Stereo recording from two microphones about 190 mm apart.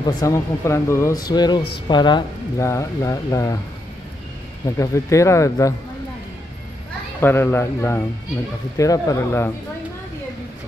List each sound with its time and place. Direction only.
0.0 s speech: 20° left (ahead or behind)
4.6 s speech: 15° left (ahead or behind)
7.2 s speech: 10° left (ahead or behind)